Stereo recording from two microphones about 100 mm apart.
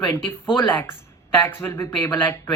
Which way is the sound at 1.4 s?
25° left (ahead or behind).